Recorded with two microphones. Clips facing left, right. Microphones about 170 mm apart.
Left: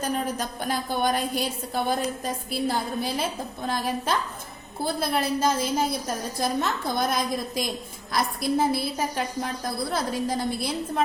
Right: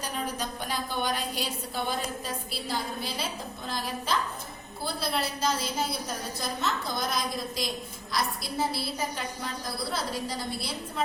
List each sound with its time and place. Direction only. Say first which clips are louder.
0.0 s a woman's voice: left 5 dB; 50° left (ahead or behind)